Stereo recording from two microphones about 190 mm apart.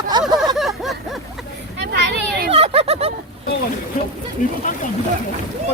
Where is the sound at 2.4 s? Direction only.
30° right (ahead or behind).